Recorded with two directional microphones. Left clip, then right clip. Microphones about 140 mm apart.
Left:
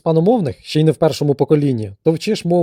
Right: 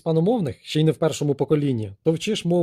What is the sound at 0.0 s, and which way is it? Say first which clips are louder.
Speech: left 7 dB; 45° left (ahead or behind).